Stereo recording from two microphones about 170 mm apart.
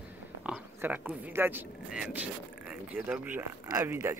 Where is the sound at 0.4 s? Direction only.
10° right (ahead or behind).